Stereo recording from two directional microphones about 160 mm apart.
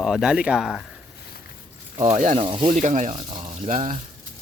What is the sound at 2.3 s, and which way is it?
Speech, 30° right (ahead or behind).